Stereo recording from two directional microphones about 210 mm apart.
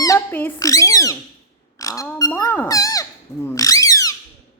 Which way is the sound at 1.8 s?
15° left (ahead or behind).